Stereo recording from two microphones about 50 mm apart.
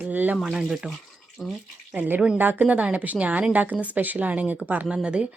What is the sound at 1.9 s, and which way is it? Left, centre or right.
Speech, right.